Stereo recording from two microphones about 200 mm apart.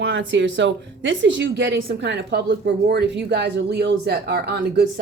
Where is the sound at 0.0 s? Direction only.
70° right (ahead or behind).